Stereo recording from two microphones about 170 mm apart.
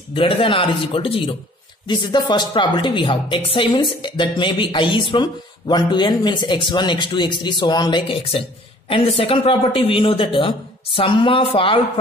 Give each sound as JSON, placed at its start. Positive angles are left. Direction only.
{"t": 0.1, "sound": "a man's voice", "side_deg": 30}